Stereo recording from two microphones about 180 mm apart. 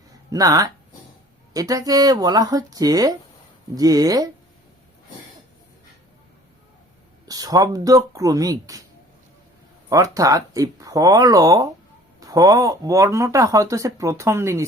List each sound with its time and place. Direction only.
0.3 s speech: 20° right (ahead or behind)
7.3 s speech: 20° right (ahead or behind)
9.9 s speech: 20° right (ahead or behind)